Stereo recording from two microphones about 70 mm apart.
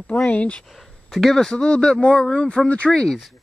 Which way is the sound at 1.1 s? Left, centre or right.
Centre.